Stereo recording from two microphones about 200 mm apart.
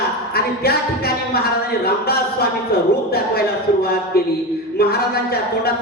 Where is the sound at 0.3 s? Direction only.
50° left (ahead or behind).